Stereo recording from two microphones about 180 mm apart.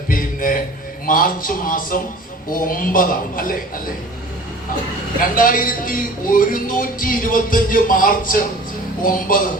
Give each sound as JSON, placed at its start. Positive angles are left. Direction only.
{"t": 0.1, "sound": "music", "side_deg": 50}
{"t": 1.0, "sound": "speech", "side_deg": 50}
{"t": 5.3, "sound": "speech", "side_deg": 50}